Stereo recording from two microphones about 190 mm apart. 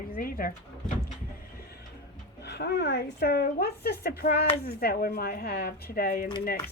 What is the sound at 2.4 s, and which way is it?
A woman's voice, 60° left (ahead or behind).